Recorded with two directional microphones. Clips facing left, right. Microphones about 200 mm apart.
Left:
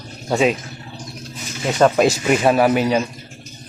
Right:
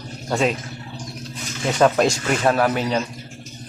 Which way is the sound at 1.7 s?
5° left (ahead or behind).